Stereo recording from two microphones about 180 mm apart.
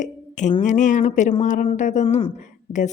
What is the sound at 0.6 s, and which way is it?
Speech, 45° left (ahead or behind).